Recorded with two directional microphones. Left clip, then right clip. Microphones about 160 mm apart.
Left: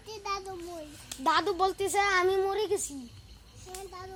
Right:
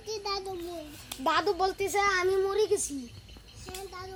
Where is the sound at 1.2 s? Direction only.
35° left (ahead or behind).